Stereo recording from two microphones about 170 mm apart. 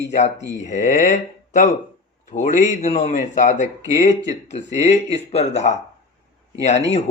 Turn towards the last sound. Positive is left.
turn(degrees=40)  # may be behind; listen again after turning